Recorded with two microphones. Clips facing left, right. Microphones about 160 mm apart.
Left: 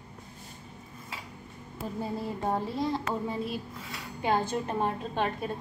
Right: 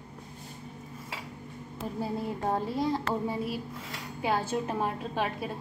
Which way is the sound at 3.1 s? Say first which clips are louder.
Right 1 dB; 10° right (ahead or behind).